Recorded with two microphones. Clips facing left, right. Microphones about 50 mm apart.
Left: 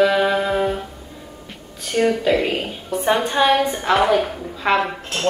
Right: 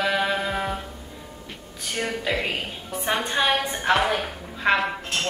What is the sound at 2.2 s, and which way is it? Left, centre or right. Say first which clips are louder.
Speech: left 7 dB; centre.